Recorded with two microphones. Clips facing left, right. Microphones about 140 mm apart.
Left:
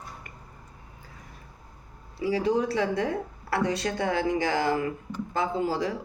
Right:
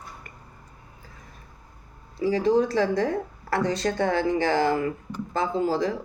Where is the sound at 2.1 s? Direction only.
40° right (ahead or behind).